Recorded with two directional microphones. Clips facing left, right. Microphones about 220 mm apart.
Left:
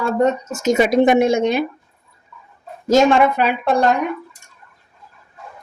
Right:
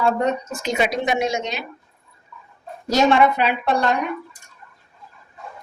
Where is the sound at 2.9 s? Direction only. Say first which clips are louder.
Left 3 dB; 50° left (ahead or behind).